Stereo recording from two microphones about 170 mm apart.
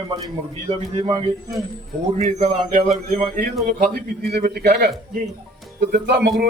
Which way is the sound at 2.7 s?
50° right (ahead or behind).